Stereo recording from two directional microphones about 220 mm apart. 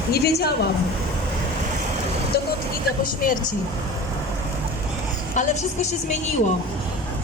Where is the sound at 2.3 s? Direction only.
45° left (ahead or behind).